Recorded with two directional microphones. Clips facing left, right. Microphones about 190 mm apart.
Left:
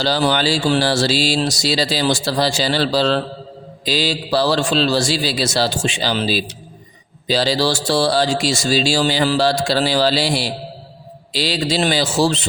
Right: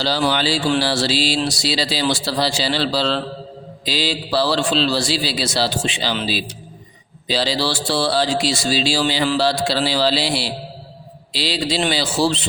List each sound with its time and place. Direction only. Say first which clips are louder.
0.0 s speech: left 2 dB; 45° left (ahead or behind)